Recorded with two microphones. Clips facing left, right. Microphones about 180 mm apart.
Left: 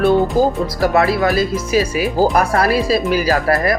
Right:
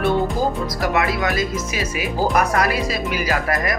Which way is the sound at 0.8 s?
30° left (ahead or behind).